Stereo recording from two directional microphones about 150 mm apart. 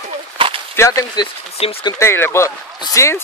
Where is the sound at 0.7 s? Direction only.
20° left (ahead or behind).